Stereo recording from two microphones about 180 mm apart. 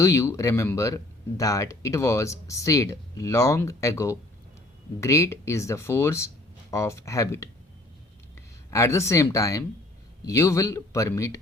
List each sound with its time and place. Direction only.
0.0 s speech: 15° left (ahead or behind)
8.7 s speech: 15° left (ahead or behind)